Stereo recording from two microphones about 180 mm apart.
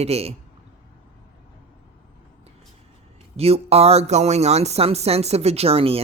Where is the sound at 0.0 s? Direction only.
35° right (ahead or behind).